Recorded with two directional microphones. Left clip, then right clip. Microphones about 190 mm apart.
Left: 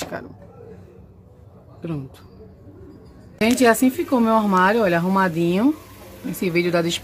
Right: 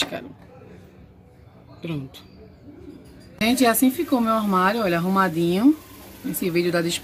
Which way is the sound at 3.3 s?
15° left (ahead or behind).